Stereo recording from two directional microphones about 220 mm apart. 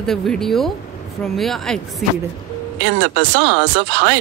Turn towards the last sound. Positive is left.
turn(degrees=-50)  # may be behind; listen again after turning